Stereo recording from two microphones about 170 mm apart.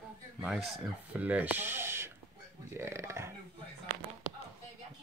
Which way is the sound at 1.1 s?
10° right (ahead or behind).